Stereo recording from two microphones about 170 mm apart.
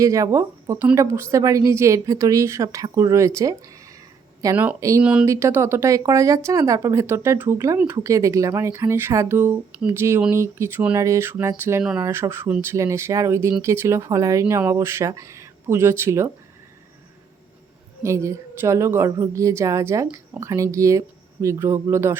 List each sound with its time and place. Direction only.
0.0 s speech: 20° right (ahead or behind)
4.5 s speech: 10° right (ahead or behind)
18.0 s speech: 15° right (ahead or behind)